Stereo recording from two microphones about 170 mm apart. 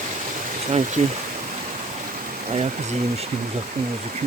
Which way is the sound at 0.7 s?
45° right (ahead or behind).